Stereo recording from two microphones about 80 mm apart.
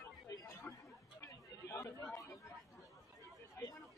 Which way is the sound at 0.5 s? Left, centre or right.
Left.